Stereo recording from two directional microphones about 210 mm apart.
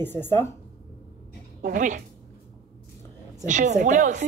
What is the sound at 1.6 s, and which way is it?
Speech, 40° right (ahead or behind).